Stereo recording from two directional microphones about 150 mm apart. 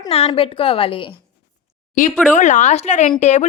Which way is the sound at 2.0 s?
60° left (ahead or behind).